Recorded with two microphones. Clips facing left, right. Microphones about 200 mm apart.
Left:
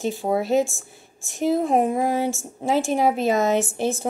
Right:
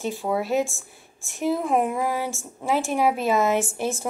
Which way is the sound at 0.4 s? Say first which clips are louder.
Left 4 dB; 25° left (ahead or behind).